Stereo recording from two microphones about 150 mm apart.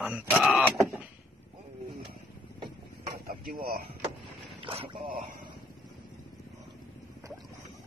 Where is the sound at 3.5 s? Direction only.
70° right (ahead or behind).